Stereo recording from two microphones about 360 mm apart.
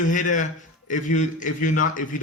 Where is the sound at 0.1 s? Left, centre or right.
Left.